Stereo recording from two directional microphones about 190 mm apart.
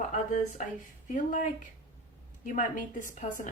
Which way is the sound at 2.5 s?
40° left (ahead or behind).